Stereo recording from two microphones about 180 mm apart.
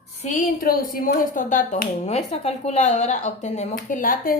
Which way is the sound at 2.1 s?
35° left (ahead or behind).